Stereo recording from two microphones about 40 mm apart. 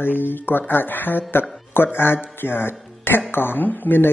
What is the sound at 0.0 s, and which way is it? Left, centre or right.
Speech, left.